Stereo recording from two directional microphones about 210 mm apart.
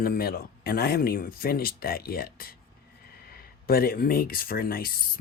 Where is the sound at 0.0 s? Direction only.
45° left (ahead or behind).